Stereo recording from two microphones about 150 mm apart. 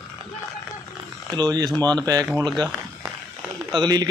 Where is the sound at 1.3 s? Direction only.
25° right (ahead or behind).